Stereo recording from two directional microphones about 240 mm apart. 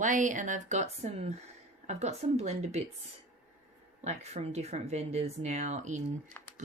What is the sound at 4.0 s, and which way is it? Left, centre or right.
Speech, right.